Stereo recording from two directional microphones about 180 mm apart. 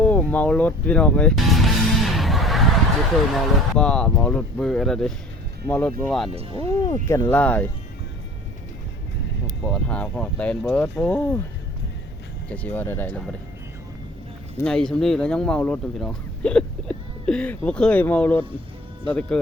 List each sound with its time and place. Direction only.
0.0 s music: 10° left (ahead or behind)
3.3 s speech: 5° left (ahead or behind)
6.3 s speech: 35° right (ahead or behind)
6.8 s speech: 20° left (ahead or behind)
9.6 s speech: 5° left (ahead or behind)
12.5 s speech: 10° left (ahead or behind)
14.6 s speech: 5° left (ahead or behind)